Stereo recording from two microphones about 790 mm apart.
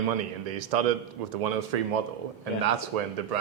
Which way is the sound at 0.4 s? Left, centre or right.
Right.